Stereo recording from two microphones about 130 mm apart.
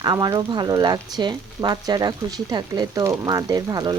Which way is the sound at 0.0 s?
30° right (ahead or behind).